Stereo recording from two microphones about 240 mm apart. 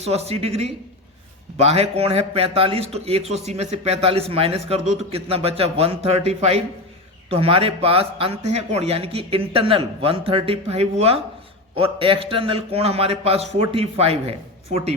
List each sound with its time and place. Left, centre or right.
0.0 s a man's voice: right